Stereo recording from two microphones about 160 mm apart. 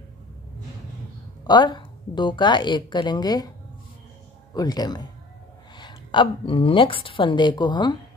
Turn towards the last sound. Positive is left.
turn(degrees=30)  # may be behind; listen again after turning